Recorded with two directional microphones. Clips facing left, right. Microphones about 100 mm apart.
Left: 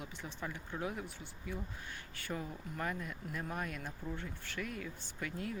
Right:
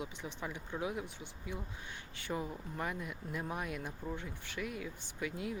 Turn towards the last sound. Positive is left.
turn(degrees=-15)  # may be behind; listen again after turning